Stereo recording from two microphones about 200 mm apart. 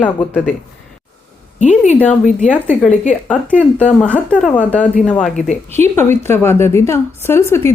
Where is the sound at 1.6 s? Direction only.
35° left (ahead or behind).